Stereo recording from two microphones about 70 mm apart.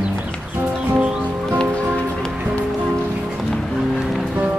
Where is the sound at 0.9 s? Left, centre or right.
Centre.